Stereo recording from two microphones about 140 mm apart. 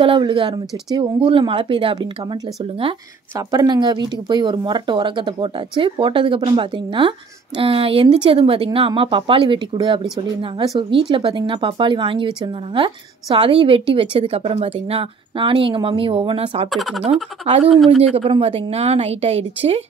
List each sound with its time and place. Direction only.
0.0 s speech: 35° right (ahead or behind)
3.3 s speech: 30° right (ahead or behind)
16.7 s speech: centre (ahead or behind)
17.0 s speech: 45° right (ahead or behind)
17.7 s speech: centre (ahead or behind)
18.1 s speech: 40° right (ahead or behind)